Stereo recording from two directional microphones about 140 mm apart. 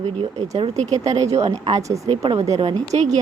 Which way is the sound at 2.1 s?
45° right (ahead or behind).